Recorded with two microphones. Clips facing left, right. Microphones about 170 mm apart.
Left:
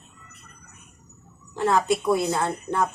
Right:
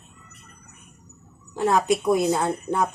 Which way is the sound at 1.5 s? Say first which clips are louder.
Right 1 dB; 15° right (ahead or behind).